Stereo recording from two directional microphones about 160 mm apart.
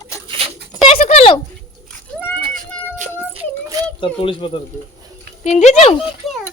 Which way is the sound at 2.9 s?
50° right (ahead or behind).